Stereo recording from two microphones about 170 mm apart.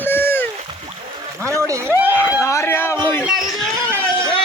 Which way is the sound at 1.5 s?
20° right (ahead or behind).